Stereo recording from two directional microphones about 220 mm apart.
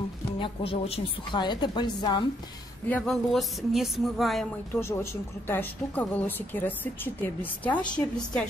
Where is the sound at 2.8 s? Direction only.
5° left (ahead or behind).